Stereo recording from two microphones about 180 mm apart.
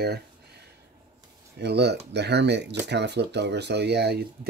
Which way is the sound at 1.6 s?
65° right (ahead or behind).